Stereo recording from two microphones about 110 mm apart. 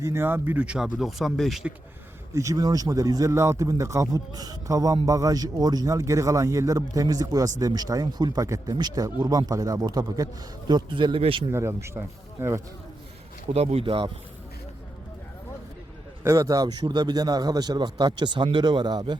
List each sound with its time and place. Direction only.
0.0 s speech: 20° right (ahead or behind); by 1.6 s centre (ahead or behind)
2.3 s speech: 30° right (ahead or behind); by 11.4 s 55° right (ahead or behind)
11.5 s speech: 25° right (ahead or behind)
13.5 s speech: 65° right (ahead or behind)
16.2 s speech: 30° right (ahead or behind)